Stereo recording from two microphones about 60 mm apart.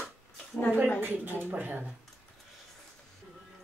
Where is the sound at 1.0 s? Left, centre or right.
Right.